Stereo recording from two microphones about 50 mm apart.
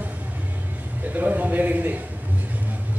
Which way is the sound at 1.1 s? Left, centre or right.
Right.